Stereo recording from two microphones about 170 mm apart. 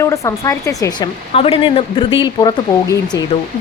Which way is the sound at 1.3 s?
35° left (ahead or behind).